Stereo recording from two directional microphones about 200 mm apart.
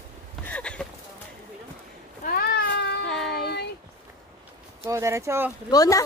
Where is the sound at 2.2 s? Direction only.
50° left (ahead or behind).